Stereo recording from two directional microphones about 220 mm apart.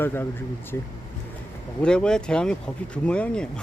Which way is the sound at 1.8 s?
5° left (ahead or behind).